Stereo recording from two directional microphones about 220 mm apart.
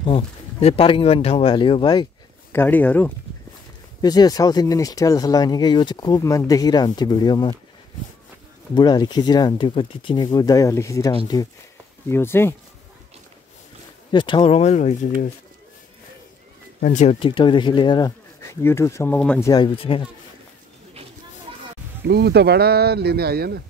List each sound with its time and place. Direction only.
0.0 s speech: 25° left (ahead or behind)
2.5 s speech: 10° left (ahead or behind)
8.7 s speech: 20° left (ahead or behind)
14.1 s speech: 20° left (ahead or behind)
16.8 s speech: 35° left (ahead or behind); by 19.5 s 5° left (ahead or behind)
19.5 s speech: 20° left (ahead or behind)
22.0 s speech: 50° right (ahead or behind)